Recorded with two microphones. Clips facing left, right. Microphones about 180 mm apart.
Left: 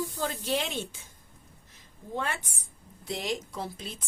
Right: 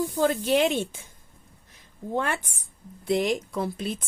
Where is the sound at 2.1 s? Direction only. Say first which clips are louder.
Right 6 dB; 55° right (ahead or behind).